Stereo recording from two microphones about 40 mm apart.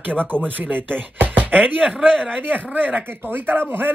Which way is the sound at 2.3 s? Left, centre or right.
Right.